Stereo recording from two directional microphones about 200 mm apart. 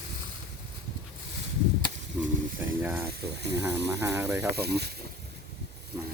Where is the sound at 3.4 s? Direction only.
55° right (ahead or behind).